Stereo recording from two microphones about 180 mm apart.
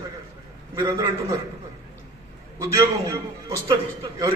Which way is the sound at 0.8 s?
20° right (ahead or behind).